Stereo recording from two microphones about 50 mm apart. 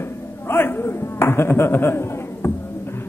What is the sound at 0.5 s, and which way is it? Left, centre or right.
A man's voice, left.